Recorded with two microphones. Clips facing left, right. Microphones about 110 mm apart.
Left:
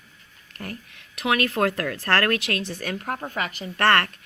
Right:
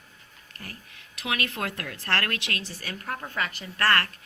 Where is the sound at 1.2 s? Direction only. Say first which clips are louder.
Left 8 dB; 40° left (ahead or behind).